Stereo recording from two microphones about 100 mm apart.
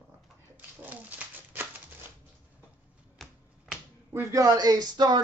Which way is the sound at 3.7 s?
10° right (ahead or behind).